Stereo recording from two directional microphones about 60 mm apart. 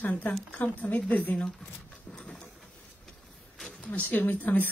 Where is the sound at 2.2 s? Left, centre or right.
Centre.